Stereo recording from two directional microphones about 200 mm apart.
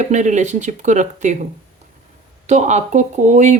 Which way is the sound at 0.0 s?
35° right (ahead or behind).